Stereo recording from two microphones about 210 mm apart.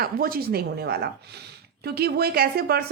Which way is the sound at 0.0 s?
45° right (ahead or behind).